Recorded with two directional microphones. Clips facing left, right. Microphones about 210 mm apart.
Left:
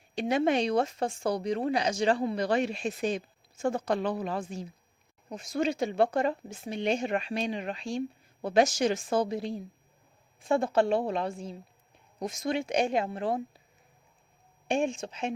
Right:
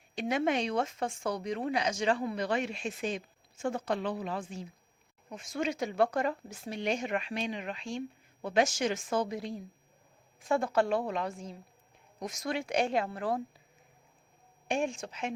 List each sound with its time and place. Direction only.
0.2 s speech: 35° left (ahead or behind)
14.7 s speech: 25° left (ahead or behind)